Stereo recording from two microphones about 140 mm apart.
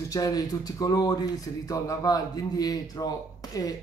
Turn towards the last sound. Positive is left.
turn(degrees=25)  # may be behind; listen again after turning